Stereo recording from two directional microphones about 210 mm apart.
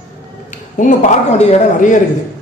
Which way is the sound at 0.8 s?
35° left (ahead or behind).